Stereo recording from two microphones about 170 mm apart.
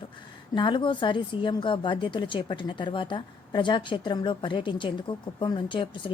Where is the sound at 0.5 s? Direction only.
30° left (ahead or behind).